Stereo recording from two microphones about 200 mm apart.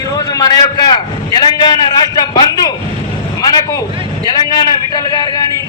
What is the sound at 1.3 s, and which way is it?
A man's voice, 20° left (ahead or behind).